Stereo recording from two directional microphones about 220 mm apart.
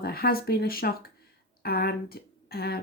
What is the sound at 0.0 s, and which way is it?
Speech, 45° left (ahead or behind).